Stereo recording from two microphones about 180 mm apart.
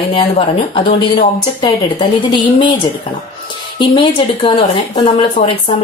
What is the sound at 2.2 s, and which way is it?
Speech, 25° left (ahead or behind).